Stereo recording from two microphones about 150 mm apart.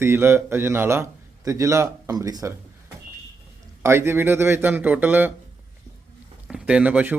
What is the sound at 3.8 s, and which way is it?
A man's voice, 15° right (ahead or behind).